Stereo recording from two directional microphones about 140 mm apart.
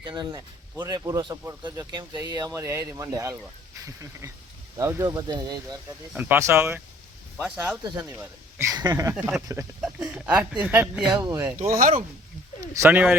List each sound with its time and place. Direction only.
0.0 s speech: 30° right (ahead or behind)
6.1 s speech: 15° right (ahead or behind)
8.0 s speech: 15° right (ahead or behind)
9.8 s speech: 5° right (ahead or behind)
11.1 s speech: 25° right (ahead or behind)
11.5 s speech: 80° right
12.7 s speech: 15° right (ahead or behind)